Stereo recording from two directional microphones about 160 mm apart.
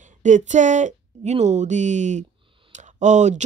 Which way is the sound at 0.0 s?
50° right (ahead or behind).